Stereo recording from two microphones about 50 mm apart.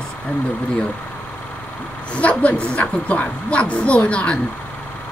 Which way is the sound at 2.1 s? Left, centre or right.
Left.